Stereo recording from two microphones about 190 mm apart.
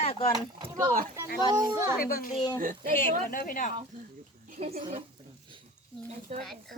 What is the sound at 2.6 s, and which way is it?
Speech, 45° right (ahead or behind).